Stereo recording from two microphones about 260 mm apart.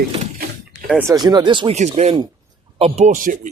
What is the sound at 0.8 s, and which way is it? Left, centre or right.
Speech, centre.